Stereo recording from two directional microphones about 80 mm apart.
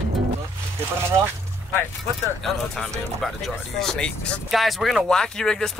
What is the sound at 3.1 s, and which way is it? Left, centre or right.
Speech, centre.